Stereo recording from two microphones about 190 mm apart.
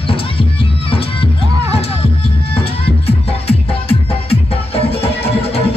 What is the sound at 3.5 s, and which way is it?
Music, 30° left (ahead or behind).